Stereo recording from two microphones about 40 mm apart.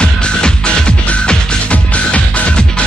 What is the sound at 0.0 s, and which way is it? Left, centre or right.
Music, left.